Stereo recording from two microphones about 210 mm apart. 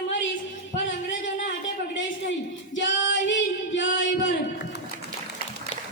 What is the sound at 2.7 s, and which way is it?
Singing, 60° left (ahead or behind).